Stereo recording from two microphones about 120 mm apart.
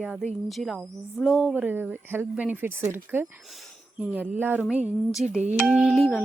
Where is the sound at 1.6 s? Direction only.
15° right (ahead or behind).